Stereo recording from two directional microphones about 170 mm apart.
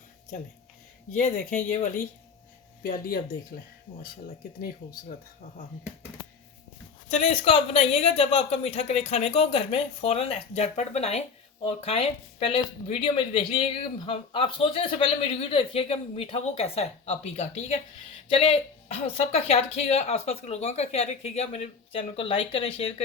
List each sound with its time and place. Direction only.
1.1 s speech: 45° left (ahead or behind)
2.8 s speech: 60° left (ahead or behind)
7.1 s speech: 40° left (ahead or behind)